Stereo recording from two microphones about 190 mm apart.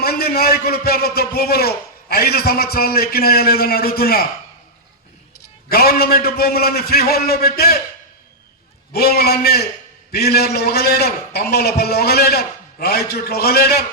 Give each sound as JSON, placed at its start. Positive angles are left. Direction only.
{"t": 0.0, "sound": "a man's voice", "side_deg": 55}
{"t": 5.6, "sound": "a man's voice", "side_deg": 55}
{"t": 8.9, "sound": "a man's voice", "side_deg": 55}